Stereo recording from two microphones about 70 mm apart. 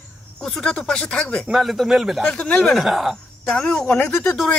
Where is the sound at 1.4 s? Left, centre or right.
Centre.